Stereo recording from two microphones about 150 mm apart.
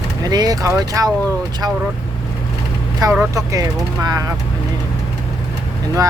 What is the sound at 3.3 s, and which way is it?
Speech, 25° right (ahead or behind).